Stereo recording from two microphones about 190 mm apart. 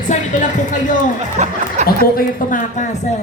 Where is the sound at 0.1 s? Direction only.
40° left (ahead or behind).